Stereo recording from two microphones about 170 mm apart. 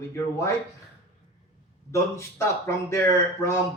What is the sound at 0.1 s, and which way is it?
Speech, 15° left (ahead or behind).